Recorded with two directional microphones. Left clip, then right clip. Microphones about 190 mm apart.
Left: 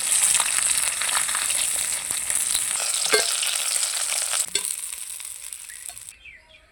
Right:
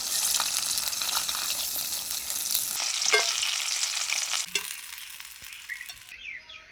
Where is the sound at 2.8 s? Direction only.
65° left (ahead or behind).